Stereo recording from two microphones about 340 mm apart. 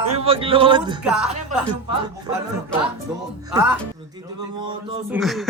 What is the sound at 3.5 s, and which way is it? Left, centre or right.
A man's voice, centre.